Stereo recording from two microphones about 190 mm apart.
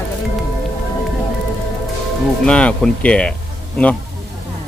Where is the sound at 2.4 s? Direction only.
5° left (ahead or behind).